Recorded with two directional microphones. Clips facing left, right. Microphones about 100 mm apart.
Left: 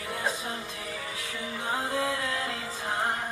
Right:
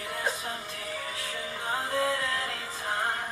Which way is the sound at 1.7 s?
20° left (ahead or behind).